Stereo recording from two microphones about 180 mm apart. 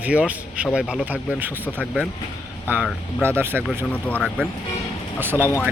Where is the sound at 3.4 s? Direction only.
10° right (ahead or behind).